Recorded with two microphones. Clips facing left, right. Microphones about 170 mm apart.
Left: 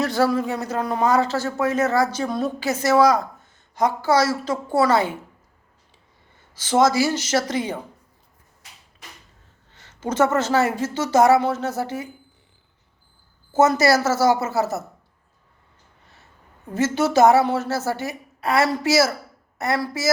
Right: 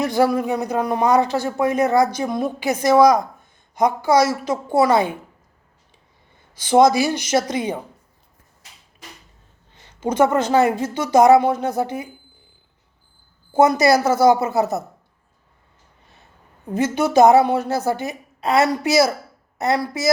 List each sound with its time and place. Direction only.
0.0 s a woman's voice: 15° right (ahead or behind)
6.6 s a woman's voice: 15° right (ahead or behind)
9.7 s a woman's voice: 15° right (ahead or behind)
13.5 s a woman's voice: 15° right (ahead or behind)
16.7 s a woman's voice: 15° right (ahead or behind)